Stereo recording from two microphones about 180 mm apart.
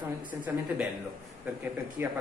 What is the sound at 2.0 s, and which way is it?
Speech, 15° right (ahead or behind).